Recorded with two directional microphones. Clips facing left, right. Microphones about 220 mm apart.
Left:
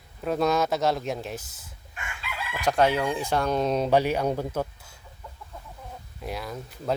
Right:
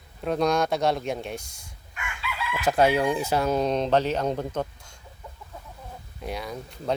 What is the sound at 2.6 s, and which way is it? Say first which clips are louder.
Speech: right 2 dB; 5° right (ahead or behind).